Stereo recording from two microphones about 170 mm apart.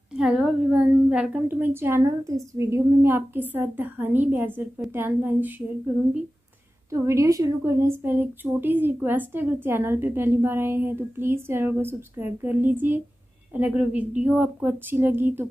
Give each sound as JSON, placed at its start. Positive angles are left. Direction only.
{"t": 0.1, "sound": "a woman's voice", "side_deg": 0}
{"t": 6.9, "sound": "a woman's voice", "side_deg": -20}